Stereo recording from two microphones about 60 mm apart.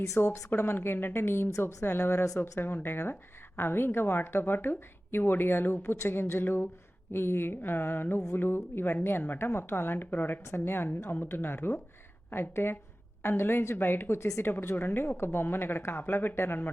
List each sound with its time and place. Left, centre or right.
0.0 s speech: left
0.5 s speech: left
14.5 s speech: left